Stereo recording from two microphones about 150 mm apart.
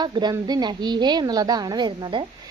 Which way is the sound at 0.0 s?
30° right (ahead or behind).